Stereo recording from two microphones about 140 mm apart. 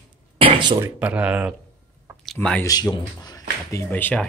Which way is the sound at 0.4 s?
35° right (ahead or behind).